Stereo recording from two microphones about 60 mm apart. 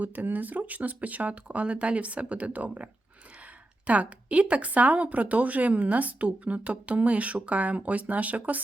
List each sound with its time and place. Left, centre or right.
0.0 s speech: right